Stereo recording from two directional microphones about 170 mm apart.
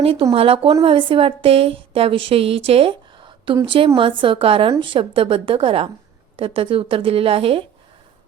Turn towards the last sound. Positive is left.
turn(degrees=-35)  # may be behind; listen again after turning